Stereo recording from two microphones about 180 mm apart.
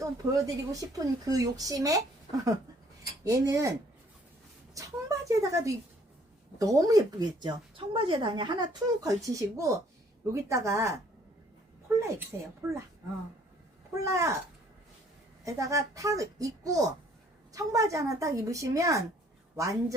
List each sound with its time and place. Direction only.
0.0 s speech: 20° right (ahead or behind)
2.3 s a sound: 35° left (ahead or behind)
3.2 s a woman's voice: 20° right (ahead or behind)
11.9 s a sound: 15° right (ahead or behind)
12.3 s speech: 15° right (ahead or behind)
13.9 s speech: 15° right (ahead or behind)
15.4 s speech: 15° right (ahead or behind)